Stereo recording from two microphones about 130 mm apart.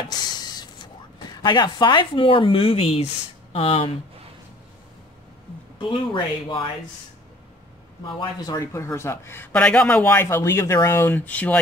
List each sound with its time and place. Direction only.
0.1 s printer: 30° left (ahead or behind)
1.4 s speech: 35° left (ahead or behind)
5.8 s speech: 40° left (ahead or behind)
8.1 s a man's voice: 35° left (ahead or behind); by 11.6 s 10° left (ahead or behind)